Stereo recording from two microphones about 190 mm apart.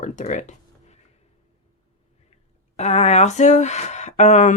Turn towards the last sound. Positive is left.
turn(degrees=40)  # may be behind; listen again after turning